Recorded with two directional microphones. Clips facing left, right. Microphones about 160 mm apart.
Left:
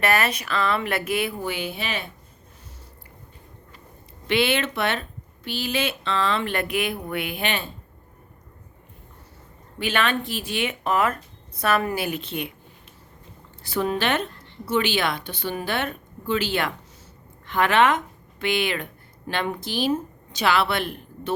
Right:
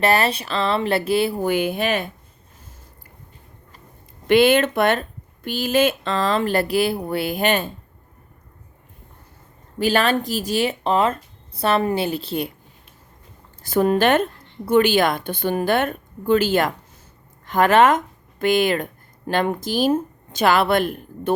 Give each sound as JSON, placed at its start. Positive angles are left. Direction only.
{"t": 0.0, "sound": "speech", "side_deg": -30}
{"t": 1.5, "sound": "speech", "side_deg": -50}
{"t": 4.3, "sound": "speech", "side_deg": -45}
{"t": 9.7, "sound": "speech", "side_deg": -40}
{"t": 13.6, "sound": "a woman's voice", "side_deg": -45}